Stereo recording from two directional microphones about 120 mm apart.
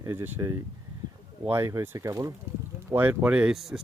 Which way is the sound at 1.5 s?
20° right (ahead or behind).